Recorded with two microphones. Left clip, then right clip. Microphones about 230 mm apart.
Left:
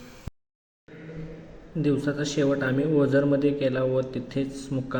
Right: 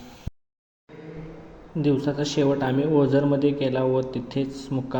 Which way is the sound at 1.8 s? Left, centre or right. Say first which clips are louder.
Right 2 dB; centre.